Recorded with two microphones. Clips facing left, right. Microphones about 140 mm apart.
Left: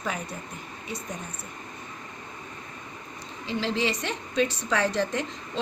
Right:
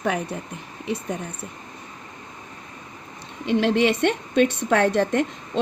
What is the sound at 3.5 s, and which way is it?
A woman's voice, 65° right (ahead or behind).